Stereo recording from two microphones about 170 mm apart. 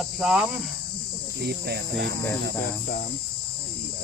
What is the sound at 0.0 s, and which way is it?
Cricket, 5° right (ahead or behind).